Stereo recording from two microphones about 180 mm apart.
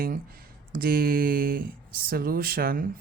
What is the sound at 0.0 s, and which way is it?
Speech, 55° right (ahead or behind).